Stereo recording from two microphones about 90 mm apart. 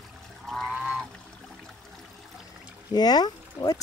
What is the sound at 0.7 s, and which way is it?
Goose, 10° right (ahead or behind).